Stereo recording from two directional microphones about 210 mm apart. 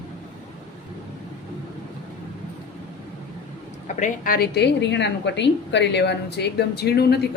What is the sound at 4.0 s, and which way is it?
A woman's voice, 40° left (ahead or behind).